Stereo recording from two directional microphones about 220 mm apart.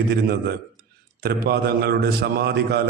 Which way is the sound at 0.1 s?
50° right (ahead or behind).